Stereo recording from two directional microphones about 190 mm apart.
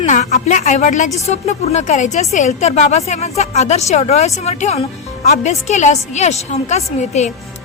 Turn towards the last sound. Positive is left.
turn(degrees=35)  # may be behind; listen again after turning